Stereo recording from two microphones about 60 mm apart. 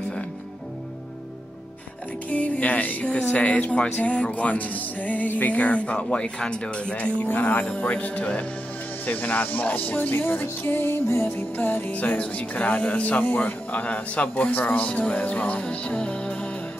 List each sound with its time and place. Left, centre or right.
2.2 s speech: left
9.0 s music: left
11.2 s speech: left